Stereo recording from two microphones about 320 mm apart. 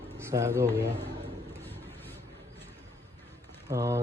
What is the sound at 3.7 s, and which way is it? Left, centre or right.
Speech, centre.